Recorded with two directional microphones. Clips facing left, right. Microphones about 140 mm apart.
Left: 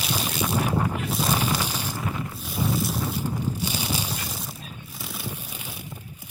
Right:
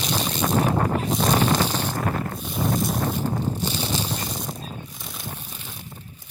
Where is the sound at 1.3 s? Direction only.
40° right (ahead or behind).